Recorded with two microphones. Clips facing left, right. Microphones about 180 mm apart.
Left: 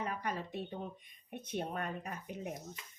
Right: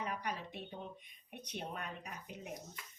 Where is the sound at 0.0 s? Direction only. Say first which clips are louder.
Left 3 dB; 50° left (ahead or behind).